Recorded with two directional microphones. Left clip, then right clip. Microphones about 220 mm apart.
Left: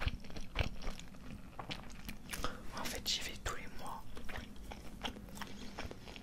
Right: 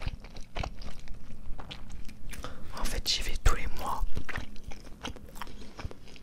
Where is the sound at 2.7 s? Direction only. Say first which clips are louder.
Right 8 dB; 25° right (ahead or behind); by 4.5 s 45° right (ahead or behind).